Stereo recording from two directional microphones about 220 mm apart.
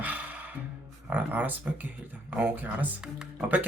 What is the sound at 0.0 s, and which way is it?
Music, 5° right (ahead or behind).